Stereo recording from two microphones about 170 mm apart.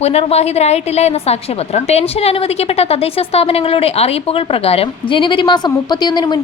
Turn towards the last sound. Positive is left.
turn(degrees=25)  # may be behind; listen again after turning